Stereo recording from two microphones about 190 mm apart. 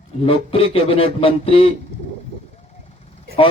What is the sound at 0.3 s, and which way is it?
A man's voice, 30° left (ahead or behind).